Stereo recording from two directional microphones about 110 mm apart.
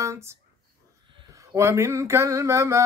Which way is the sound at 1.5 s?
25° right (ahead or behind).